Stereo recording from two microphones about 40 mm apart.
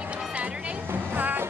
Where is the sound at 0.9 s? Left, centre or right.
Right.